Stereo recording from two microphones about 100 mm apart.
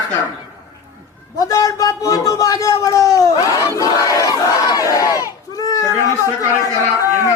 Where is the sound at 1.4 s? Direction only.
35° left (ahead or behind).